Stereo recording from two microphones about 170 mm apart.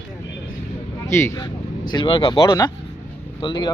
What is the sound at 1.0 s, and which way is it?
Speech, 15° left (ahead or behind).